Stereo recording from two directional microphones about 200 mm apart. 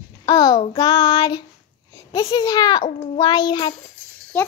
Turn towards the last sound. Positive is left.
turn(degrees=5)  # may be behind; listen again after turning